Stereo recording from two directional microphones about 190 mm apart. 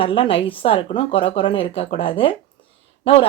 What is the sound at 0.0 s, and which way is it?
Speech, 30° left (ahead or behind).